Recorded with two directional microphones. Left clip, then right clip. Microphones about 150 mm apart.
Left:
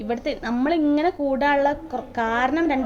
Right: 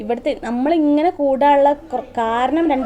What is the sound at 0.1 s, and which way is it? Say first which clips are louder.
A woman's voice: right 5 dB; 35° right (ahead or behind).